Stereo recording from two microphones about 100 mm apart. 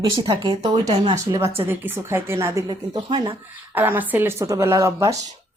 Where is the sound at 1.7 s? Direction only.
20° right (ahead or behind).